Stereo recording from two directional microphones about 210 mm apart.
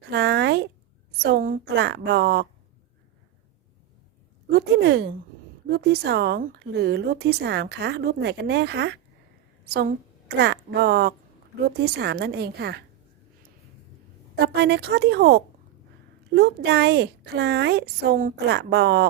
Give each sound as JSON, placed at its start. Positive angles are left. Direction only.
{"t": 0.1, "sound": "a sound", "side_deg": -55}
{"t": 1.2, "sound": "a woman's voice", "side_deg": -45}
{"t": 4.5, "sound": "a woman's voice", "side_deg": -50}
{"t": 14.4, "sound": "a woman's voice", "side_deg": -50}